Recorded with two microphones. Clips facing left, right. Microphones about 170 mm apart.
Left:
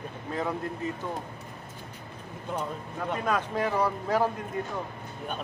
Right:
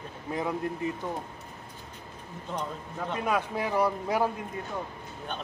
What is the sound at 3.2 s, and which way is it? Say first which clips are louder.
Speech: left 1 dB; 10° right (ahead or behind).